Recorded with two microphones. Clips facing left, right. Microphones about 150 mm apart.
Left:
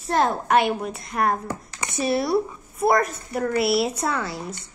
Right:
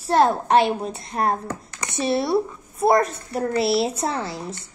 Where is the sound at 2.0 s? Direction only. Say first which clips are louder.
Right 1 dB; 25° right (ahead or behind).